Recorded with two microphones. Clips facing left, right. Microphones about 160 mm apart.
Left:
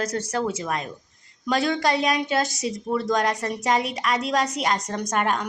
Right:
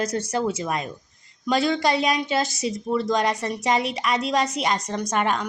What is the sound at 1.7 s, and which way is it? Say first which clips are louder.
Speech: right 1 dB; 5° right (ahead or behind).